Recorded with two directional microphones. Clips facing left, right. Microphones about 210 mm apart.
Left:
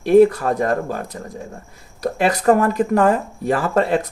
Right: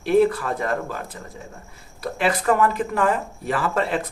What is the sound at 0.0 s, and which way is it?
Speech, 45° left (ahead or behind).